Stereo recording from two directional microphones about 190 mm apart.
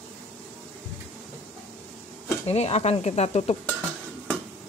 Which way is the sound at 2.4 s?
35° left (ahead or behind).